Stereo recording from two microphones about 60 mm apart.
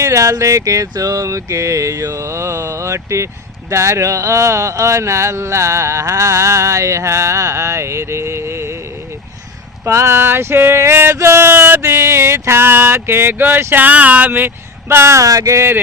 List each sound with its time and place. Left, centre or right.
0.0 s speech: right
9.8 s male singing: right
11.1 s speech: right
13.8 s speech: right
14.8 s speech: right
15.2 s a sound: right
15.5 s male singing: right